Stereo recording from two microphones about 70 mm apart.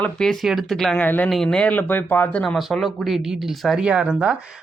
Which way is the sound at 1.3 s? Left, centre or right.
Centre.